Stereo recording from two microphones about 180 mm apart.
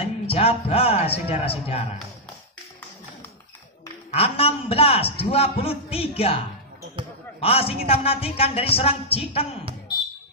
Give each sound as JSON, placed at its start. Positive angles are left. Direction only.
{"t": 0.3, "sound": "a man's voice", "side_deg": 35}
{"t": 4.1, "sound": "a man's voice", "side_deg": 30}
{"t": 7.3, "sound": "a man's voice", "side_deg": 30}